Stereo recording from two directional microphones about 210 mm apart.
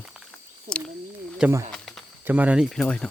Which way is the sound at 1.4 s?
15° right (ahead or behind).